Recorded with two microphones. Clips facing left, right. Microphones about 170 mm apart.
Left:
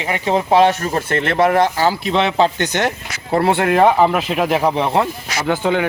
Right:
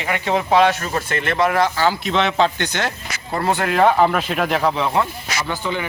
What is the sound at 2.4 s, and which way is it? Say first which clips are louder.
Speech: left 3 dB; 40° left (ahead or behind).